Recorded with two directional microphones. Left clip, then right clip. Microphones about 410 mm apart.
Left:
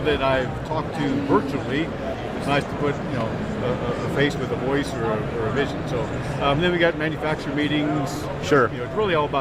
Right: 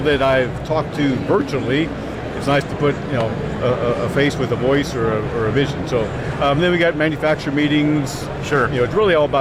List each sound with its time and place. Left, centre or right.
0.0 s speech: right
2.5 s speech: right
4.2 s speech: right
6.4 s speech: right
8.5 s speech: left
9.0 s speech: right